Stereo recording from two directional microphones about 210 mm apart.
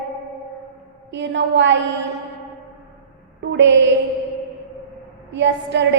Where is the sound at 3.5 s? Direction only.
60° right (ahead or behind).